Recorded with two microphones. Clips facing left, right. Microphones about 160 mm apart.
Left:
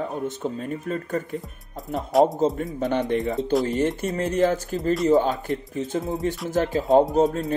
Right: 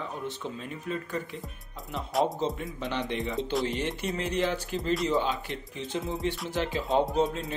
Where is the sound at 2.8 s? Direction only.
50° left (ahead or behind).